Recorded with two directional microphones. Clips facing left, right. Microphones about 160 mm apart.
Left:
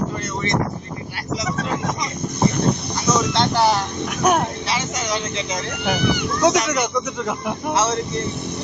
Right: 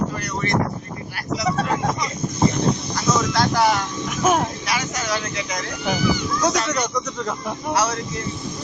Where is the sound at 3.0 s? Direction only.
25° left (ahead or behind).